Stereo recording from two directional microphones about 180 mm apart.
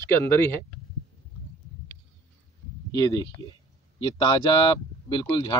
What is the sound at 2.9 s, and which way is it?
Speech, 20° left (ahead or behind).